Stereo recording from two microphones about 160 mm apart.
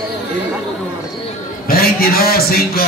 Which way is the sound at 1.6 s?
70° left (ahead or behind).